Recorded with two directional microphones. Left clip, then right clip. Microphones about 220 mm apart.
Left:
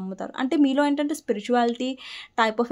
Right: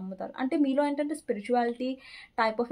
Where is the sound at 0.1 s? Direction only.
40° left (ahead or behind).